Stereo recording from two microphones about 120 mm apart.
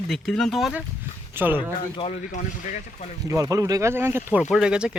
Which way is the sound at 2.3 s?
90° left.